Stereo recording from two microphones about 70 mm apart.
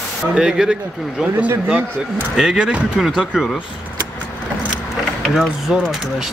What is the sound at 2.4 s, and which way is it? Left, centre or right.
Speech, centre.